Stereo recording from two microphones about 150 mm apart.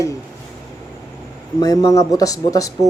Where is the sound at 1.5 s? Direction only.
25° left (ahead or behind).